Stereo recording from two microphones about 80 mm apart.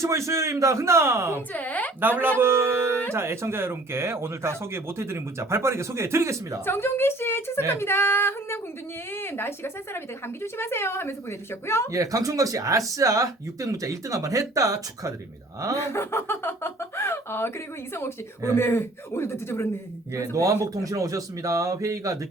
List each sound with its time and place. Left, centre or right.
0.0 s speech: right
1.5 s speech: centre
2.0 s speech: right
6.7 s speech: left
11.9 s speech: right
15.9 s speech: left
18.5 s speech: left
20.3 s speech: right